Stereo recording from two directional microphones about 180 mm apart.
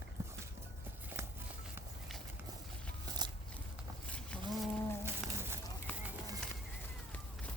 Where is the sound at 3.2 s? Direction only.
25° right (ahead or behind).